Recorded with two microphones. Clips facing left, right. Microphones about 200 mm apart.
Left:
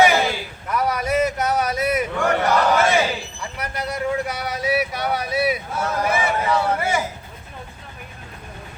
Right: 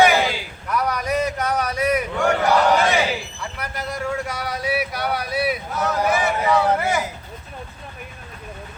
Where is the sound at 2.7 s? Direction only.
15° right (ahead or behind).